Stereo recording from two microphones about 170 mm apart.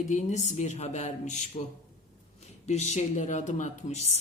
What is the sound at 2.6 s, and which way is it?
Speech, 40° left (ahead or behind).